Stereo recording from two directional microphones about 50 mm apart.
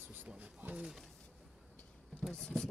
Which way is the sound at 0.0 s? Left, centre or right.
Right.